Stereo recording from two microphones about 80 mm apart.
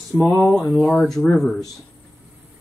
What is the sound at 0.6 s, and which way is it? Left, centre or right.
Speech, centre.